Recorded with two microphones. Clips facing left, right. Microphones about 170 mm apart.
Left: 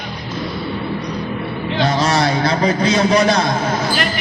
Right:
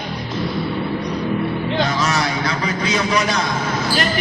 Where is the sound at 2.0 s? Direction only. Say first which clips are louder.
Left 4 dB; 35° left (ahead or behind).